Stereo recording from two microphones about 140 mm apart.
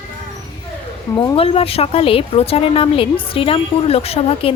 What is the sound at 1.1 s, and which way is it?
Speech, 40° left (ahead or behind).